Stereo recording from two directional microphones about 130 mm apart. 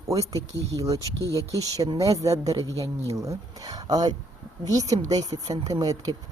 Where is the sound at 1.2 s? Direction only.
25° left (ahead or behind).